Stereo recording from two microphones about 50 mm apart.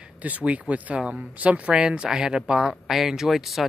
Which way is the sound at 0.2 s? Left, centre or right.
Right.